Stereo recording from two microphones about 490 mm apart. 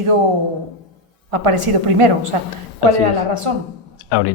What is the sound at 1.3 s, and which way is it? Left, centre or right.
A woman's voice, right.